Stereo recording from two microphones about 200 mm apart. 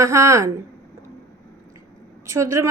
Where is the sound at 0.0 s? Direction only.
15° right (ahead or behind).